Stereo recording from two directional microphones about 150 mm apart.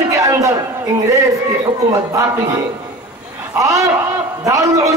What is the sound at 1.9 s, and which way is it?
A man's voice, 20° right (ahead or behind).